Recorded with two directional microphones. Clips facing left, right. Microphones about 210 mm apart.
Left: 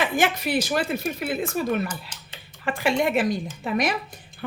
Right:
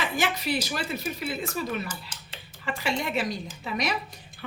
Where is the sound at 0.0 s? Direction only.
50° left (ahead or behind).